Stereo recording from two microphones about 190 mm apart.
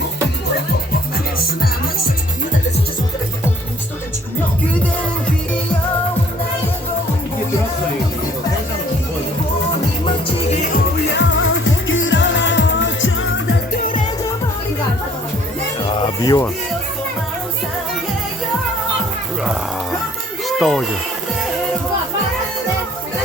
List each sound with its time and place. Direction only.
1.6 s music: 50° left (ahead or behind)
10.3 s music: 40° left (ahead or behind)
10.9 s music: 65° left (ahead or behind); by 13.6 s 85° left
13.7 s music: 45° left (ahead or behind)
15.9 s music: 25° left (ahead or behind)
20.6 s speech: centre (ahead or behind)